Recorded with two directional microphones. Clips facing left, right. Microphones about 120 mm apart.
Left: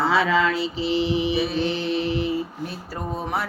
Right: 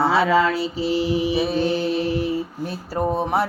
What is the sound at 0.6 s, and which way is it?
Music, 40° right (ahead or behind).